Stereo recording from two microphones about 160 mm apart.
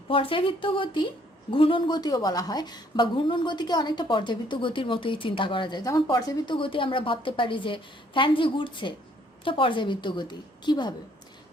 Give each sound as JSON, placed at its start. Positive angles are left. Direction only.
{"t": 0.1, "sound": "a woman's voice", "side_deg": 35}